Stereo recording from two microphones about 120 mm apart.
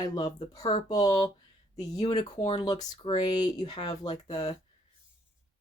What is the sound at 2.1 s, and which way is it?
Speech, 45° left (ahead or behind).